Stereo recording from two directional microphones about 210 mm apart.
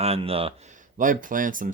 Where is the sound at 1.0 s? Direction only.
40° right (ahead or behind).